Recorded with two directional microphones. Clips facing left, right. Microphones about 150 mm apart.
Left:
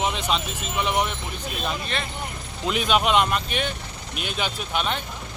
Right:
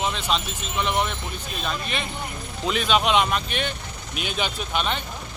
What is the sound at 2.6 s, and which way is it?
Speech, 5° left (ahead or behind).